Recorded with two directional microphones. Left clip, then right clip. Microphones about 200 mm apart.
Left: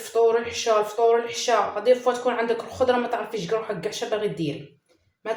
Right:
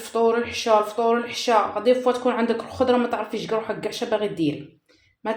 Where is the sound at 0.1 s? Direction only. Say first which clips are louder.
Even; 45° right (ahead or behind).